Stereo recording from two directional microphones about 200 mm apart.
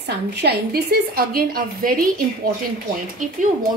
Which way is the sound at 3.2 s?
40° right (ahead or behind).